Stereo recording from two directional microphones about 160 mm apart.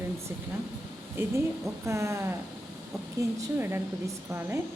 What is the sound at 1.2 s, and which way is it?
A woman's voice, 15° right (ahead or behind).